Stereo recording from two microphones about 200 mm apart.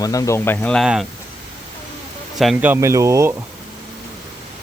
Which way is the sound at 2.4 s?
5° right (ahead or behind).